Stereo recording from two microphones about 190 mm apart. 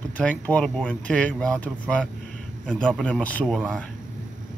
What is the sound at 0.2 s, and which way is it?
Speech, 5° left (ahead or behind).